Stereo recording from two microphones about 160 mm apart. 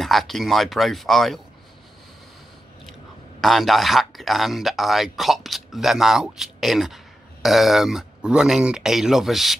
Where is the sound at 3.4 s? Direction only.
Centre (ahead or behind).